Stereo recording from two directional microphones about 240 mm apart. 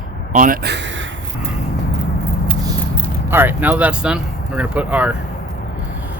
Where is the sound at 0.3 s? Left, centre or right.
Right.